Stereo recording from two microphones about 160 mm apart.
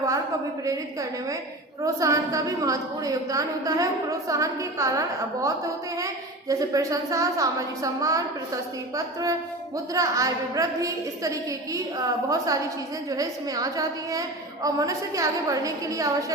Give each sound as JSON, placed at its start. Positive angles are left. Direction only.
{"t": 0.6, "sound": "a woman's voice", "side_deg": -20}